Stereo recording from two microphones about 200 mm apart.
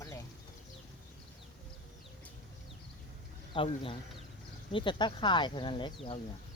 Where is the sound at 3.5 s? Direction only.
25° left (ahead or behind).